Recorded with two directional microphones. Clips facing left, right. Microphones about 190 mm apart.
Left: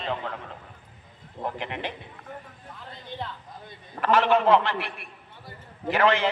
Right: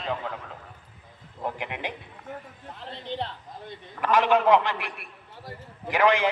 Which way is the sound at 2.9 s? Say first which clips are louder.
Right 4 dB; 30° right (ahead or behind).